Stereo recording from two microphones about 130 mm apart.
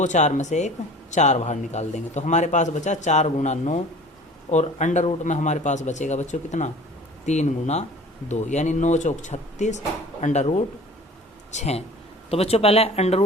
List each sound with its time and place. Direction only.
0.0 s a man's voice: 65° left (ahead or behind)